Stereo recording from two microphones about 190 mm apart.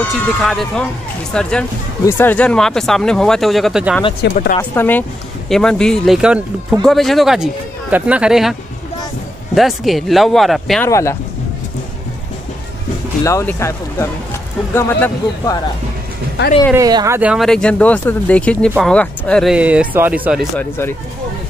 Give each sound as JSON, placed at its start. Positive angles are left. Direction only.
{"t": 0.1, "sound": "speech", "side_deg": 0}
{"t": 4.2, "sound": "speech", "side_deg": 45}
{"t": 4.6, "sound": "a man's voice", "side_deg": 10}
{"t": 9.6, "sound": "speech", "side_deg": 0}
{"t": 10.9, "sound": "a man's voice", "side_deg": 15}
{"t": 13.2, "sound": "a man's voice", "side_deg": 15}
{"t": 16.7, "sound": "speech", "side_deg": -20}
{"t": 20.5, "sound": "a man's voice", "side_deg": 10}